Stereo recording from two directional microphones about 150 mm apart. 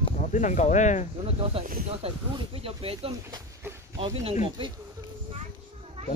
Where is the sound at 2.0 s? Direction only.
40° right (ahead or behind).